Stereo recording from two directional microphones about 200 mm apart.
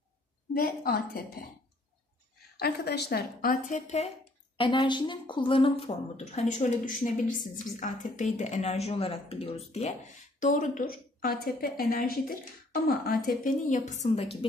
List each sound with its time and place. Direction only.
0.6 s a woman's voice: 45° left (ahead or behind)
2.6 s a woman's voice: 55° left (ahead or behind); by 4.1 s 35° left (ahead or behind)
4.6 s speech: 25° left (ahead or behind)
7.0 s a woman's voice: 40° left (ahead or behind)